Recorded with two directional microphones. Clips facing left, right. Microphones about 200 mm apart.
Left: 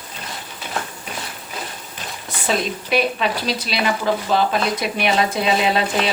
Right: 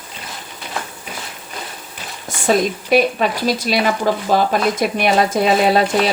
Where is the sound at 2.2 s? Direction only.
45° right (ahead or behind).